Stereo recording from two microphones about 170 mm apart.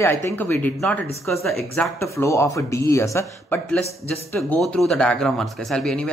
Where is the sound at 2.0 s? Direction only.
15° left (ahead or behind).